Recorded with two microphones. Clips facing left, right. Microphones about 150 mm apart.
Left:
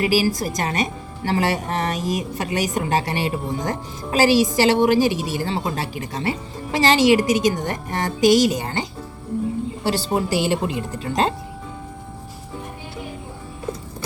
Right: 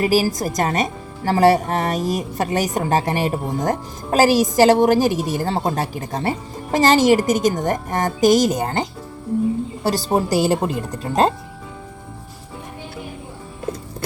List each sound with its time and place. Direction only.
0.0 s a woman's voice: 45° right (ahead or behind)